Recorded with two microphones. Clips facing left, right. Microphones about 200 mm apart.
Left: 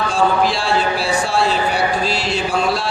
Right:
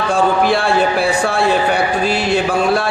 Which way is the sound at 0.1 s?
55° right (ahead or behind).